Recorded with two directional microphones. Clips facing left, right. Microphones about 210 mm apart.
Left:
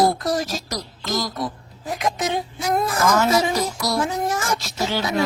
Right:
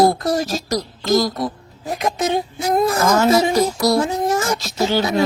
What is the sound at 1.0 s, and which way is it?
Speech, 35° right (ahead or behind).